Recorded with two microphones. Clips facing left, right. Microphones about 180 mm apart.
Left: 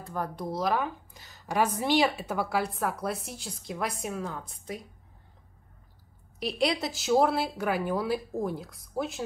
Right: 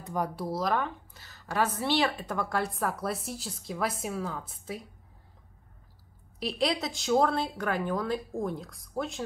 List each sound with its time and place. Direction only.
0.0 s speech: 10° right (ahead or behind)
0.5 s a woman's voice: centre (ahead or behind)
6.4 s a woman's voice: centre (ahead or behind)